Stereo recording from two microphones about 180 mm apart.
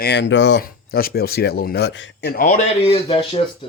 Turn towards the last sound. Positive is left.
turn(degrees=30)  # may be behind; listen again after turning